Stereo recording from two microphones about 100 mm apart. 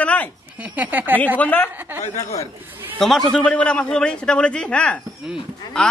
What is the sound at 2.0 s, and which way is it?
Speech, 35° left (ahead or behind).